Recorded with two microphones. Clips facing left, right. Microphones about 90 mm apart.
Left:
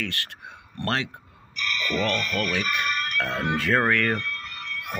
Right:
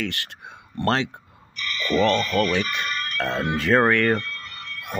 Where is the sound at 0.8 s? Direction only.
30° right (ahead or behind).